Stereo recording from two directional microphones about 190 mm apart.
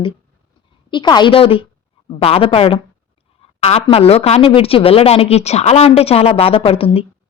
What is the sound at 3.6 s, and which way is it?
A woman's voice, 30° left (ahead or behind).